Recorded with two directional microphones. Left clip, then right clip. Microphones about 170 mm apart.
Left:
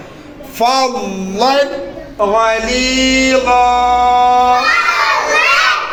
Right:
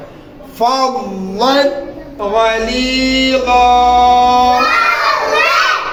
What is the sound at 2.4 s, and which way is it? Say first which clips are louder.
Mantra: right 3 dB; 10° left (ahead or behind).